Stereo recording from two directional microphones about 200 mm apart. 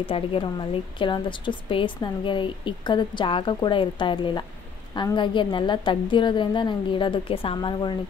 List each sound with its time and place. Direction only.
0.0 s a woman's voice: 25° left (ahead or behind)